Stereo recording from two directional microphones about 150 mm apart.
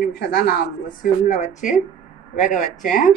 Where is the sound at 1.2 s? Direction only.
50° left (ahead or behind).